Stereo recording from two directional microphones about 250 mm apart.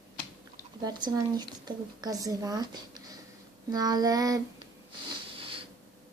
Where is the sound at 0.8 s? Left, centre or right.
Centre.